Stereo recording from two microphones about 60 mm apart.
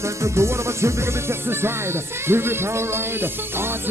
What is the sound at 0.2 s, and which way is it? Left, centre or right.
Music, right.